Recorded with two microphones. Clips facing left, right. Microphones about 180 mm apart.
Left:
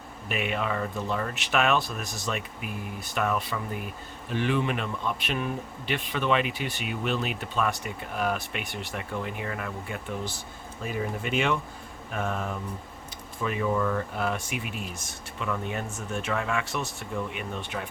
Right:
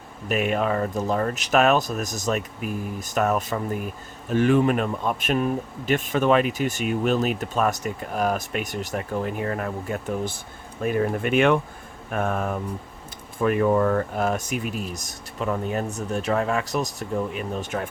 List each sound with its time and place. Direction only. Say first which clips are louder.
0.3 s speech: right 6 dB; 45° right (ahead or behind)
10.8 s speech: right 8 dB; 60° right (ahead or behind)